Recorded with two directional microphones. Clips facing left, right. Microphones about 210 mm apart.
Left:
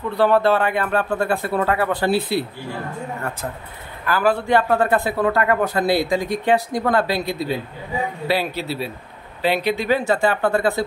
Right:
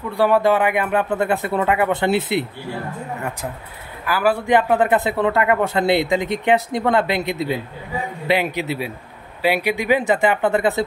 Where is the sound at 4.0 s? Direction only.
10° right (ahead or behind).